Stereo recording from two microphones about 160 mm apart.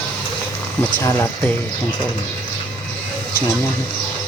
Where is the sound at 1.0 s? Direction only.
20° left (ahead or behind).